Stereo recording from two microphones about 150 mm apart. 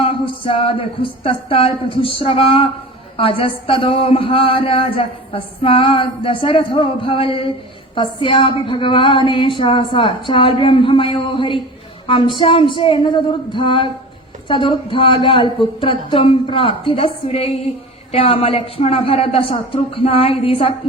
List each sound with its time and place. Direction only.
0.0 s speech: 40° left (ahead or behind)